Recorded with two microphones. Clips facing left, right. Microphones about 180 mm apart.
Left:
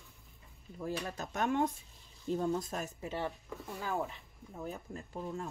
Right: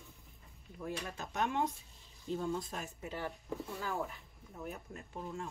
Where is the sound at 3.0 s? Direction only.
25° left (ahead or behind).